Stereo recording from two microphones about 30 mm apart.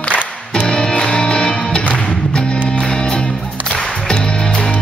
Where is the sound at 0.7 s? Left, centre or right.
Left.